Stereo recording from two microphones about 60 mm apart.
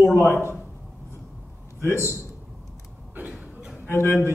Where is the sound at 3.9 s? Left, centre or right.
Left.